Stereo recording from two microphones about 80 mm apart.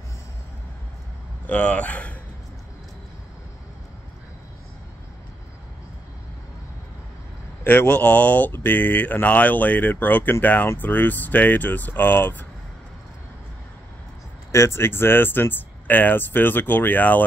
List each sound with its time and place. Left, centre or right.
1.5 s speech: centre
7.6 s speech: left
14.5 s speech: left